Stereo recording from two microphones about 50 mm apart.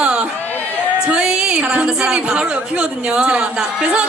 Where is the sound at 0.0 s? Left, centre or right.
Right.